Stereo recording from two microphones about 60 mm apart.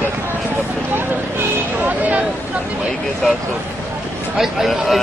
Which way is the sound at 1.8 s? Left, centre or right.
Right.